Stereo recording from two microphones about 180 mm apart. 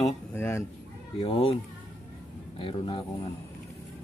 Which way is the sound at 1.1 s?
30° left (ahead or behind).